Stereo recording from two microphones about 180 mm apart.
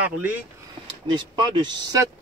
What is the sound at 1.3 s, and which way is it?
Speech, 25° right (ahead or behind).